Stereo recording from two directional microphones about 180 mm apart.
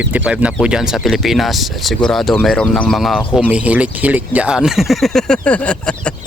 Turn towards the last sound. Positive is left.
turn(degrees=5)  # may be behind; listen again after turning